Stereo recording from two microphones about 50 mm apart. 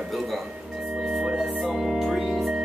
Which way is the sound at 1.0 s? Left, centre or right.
Centre.